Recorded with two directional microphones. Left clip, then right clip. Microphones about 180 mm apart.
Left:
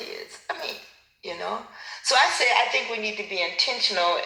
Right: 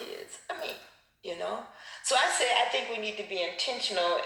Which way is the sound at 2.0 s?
15° left (ahead or behind).